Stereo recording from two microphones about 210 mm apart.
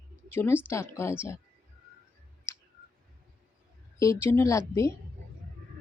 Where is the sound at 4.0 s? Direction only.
15° left (ahead or behind).